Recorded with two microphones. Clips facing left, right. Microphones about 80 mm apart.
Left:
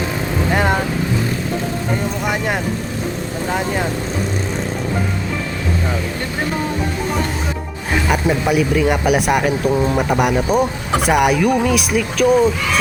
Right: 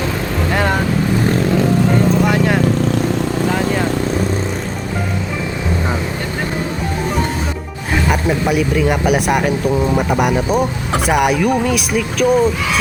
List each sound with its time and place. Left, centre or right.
0.5 s vehicle: centre
2.2 s vehicle: centre
8.0 s speech: centre